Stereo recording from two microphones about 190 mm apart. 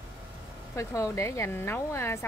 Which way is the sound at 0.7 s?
15° left (ahead or behind).